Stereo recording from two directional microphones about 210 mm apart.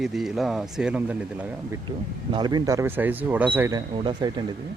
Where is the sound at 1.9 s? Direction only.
20° right (ahead or behind).